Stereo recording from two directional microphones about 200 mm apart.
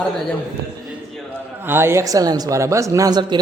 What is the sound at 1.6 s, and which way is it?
Speech, 10° right (ahead or behind).